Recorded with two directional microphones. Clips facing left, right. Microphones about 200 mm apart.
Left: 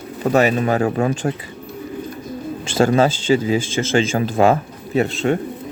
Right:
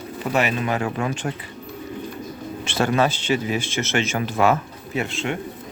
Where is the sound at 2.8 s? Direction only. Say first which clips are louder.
Left 5 dB; 25° left (ahead or behind).